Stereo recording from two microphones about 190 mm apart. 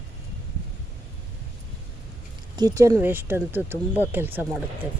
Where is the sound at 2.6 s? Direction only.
15° right (ahead or behind).